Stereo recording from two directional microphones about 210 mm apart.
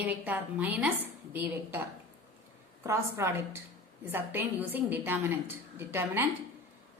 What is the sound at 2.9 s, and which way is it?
A woman's voice, 10° right (ahead or behind).